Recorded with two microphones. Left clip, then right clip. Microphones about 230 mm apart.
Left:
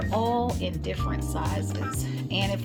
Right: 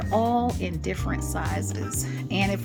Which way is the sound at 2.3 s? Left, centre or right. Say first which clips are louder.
Right 2 dB; centre.